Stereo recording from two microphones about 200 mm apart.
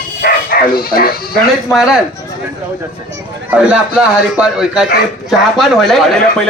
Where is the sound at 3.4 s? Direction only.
5° right (ahead or behind).